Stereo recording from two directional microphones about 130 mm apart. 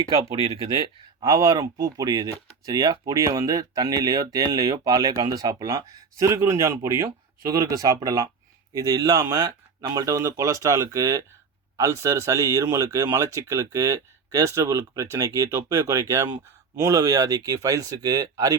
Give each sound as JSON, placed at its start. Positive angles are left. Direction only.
{"t": 1.2, "sound": "speech", "side_deg": -30}